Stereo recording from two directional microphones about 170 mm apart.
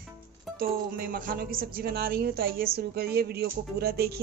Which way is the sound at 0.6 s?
60° right (ahead or behind).